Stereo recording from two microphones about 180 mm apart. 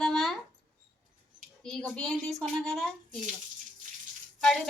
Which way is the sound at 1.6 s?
5° left (ahead or behind).